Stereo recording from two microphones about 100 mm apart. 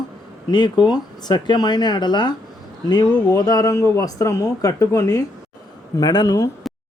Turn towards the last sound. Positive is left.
turn(degrees=35)  # may be behind; listen again after turning